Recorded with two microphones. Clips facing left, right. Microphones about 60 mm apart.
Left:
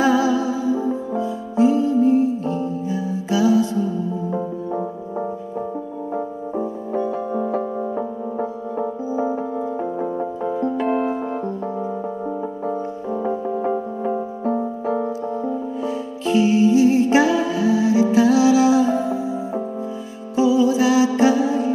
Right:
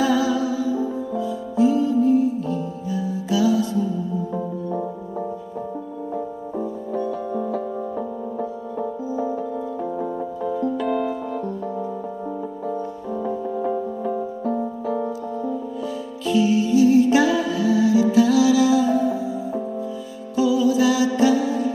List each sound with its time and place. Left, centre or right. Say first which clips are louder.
0.0 s music: left 2 dB; left
6.1 s music: left 3 dB; left
12.6 s music: left 2 dB; left